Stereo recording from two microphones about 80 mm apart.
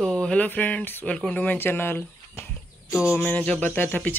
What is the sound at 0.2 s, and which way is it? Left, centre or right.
Speech, centre.